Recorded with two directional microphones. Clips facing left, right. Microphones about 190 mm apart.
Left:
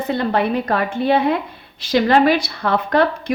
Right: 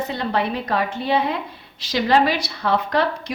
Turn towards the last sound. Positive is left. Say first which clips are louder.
# left 4 dB
turn(degrees=55)  # may be behind; listen again after turning